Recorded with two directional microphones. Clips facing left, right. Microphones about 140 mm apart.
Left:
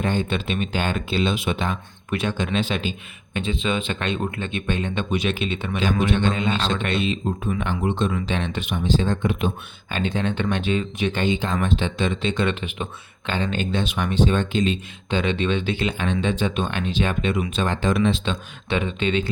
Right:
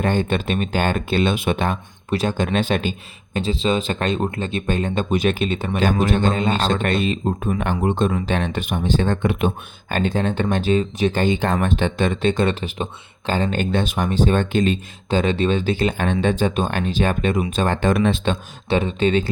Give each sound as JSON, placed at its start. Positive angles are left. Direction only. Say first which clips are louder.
{"t": 0.0, "sound": "speech", "louder": "right 3 dB", "side_deg": -50}
{"t": 2.0, "sound": "speech", "louder": "right 4 dB", "side_deg": -40}
{"t": 3.3, "sound": "speech", "louder": "right 4 dB", "side_deg": -35}
{"t": 9.9, "sound": "speech", "louder": "right 3 dB", "side_deg": -45}
{"t": 11.3, "sound": "speech", "louder": "right 3 dB", "side_deg": -60}
{"t": 18.7, "sound": "speech", "louder": "right 5 dB", "side_deg": -35}